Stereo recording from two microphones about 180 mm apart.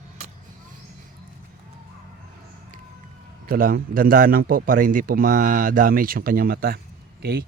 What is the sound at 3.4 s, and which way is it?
Speech, 55° right (ahead or behind).